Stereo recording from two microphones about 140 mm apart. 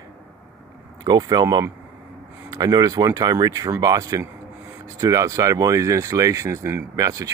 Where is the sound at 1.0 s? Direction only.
30° right (ahead or behind).